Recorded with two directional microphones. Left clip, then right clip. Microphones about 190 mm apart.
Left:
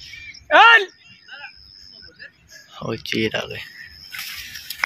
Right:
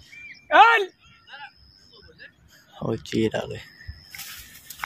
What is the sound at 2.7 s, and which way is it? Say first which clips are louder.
Speech: left 2 dB; 20° right (ahead or behind).